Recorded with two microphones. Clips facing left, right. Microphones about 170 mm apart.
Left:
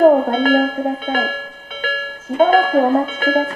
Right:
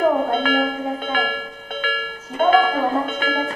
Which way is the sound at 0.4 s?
40° left (ahead or behind).